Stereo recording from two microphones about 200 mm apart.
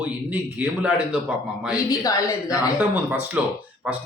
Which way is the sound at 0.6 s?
5° right (ahead or behind).